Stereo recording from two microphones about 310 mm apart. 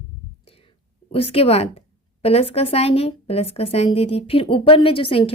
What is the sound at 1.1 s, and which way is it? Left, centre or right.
A woman's voice, centre.